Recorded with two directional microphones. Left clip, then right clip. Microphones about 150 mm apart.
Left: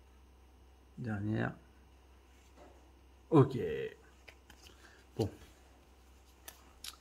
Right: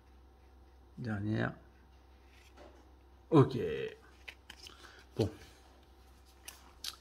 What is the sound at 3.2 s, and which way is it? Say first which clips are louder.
Speech: right 1 dB; centre (ahead or behind).